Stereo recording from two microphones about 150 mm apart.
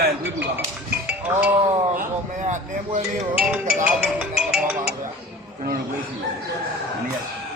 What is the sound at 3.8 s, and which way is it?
Music, 10° right (ahead or behind).